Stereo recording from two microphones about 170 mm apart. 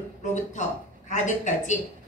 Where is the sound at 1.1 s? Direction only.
45° left (ahead or behind).